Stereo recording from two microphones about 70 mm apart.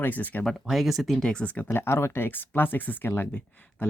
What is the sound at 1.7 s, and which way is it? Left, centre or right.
Speech, left.